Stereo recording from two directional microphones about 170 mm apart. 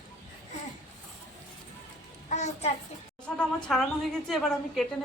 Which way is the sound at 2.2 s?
40° left (ahead or behind).